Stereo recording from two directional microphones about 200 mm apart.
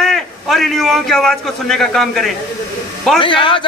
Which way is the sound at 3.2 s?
25° left (ahead or behind).